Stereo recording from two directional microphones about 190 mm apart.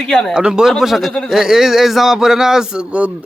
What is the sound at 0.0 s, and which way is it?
Speech, 5° left (ahead or behind).